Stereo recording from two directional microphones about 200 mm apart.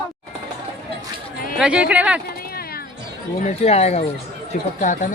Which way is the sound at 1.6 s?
5° right (ahead or behind).